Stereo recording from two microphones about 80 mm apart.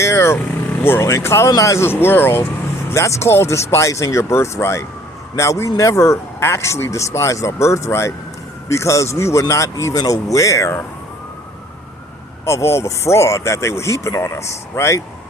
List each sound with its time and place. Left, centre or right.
0.0 s a man's voice: left
1.9 s a man's voice: left
12.5 s a man's voice: left